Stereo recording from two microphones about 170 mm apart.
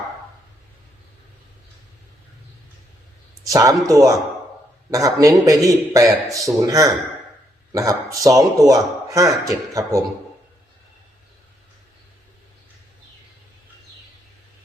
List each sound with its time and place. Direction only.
3.5 s a man's voice: 20° right (ahead or behind)